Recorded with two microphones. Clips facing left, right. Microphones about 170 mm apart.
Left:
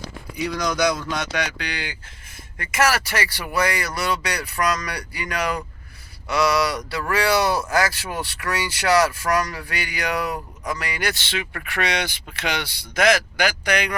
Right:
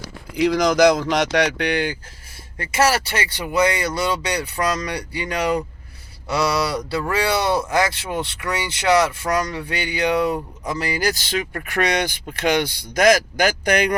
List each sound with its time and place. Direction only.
0.3 s speech: 90° right
1.5 s speech: 55° right (ahead or behind)
2.3 s speech: 30° right (ahead or behind); by 13.9 s 45° right (ahead or behind)